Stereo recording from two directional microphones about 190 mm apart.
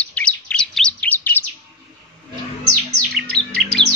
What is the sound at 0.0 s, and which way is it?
Chirp, 5° left (ahead or behind).